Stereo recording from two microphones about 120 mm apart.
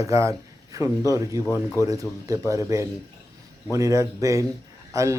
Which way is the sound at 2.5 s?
25° right (ahead or behind).